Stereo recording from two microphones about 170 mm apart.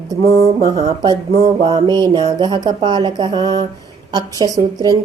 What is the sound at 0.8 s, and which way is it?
Speech, 25° right (ahead or behind).